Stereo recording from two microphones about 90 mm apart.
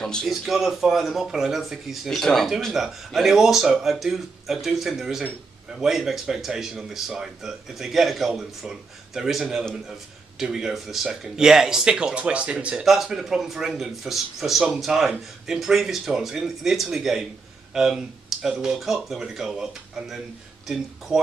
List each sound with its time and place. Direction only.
0.0 s speech: 5° left (ahead or behind)